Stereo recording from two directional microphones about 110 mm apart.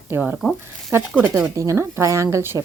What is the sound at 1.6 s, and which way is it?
Speech, 25° right (ahead or behind).